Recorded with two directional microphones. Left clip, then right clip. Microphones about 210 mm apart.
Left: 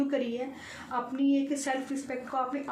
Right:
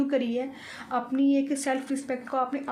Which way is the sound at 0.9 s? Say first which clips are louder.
Right 4 dB; 55° right (ahead or behind).